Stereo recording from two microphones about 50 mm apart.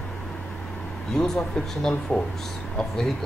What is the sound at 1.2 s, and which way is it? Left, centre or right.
Speech, centre.